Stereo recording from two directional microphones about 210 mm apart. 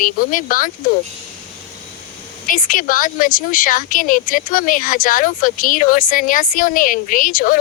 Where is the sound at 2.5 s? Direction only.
40° left (ahead or behind).